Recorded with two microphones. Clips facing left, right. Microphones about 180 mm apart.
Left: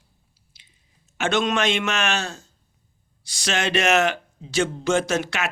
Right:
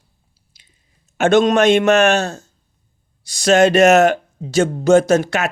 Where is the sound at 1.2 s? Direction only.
45° right (ahead or behind).